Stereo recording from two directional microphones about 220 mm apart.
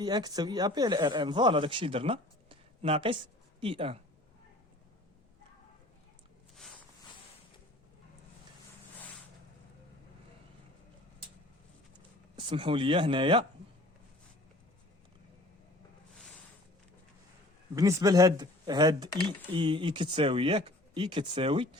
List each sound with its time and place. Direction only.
0.0 s speech: 20° right (ahead or behind)
12.4 s speech: 25° right (ahead or behind)
17.7 s speech: 15° right (ahead or behind)